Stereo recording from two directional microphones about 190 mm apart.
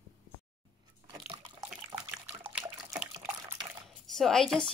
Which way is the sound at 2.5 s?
5° right (ahead or behind).